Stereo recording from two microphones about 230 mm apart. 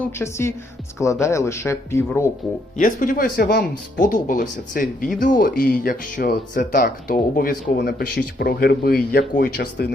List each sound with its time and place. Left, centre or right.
0.0 s speech: centre
2.7 s speech: left